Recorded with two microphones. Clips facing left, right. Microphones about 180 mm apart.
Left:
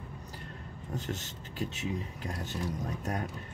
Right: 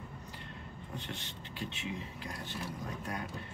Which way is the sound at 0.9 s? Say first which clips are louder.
Left 7 dB; 45° left (ahead or behind).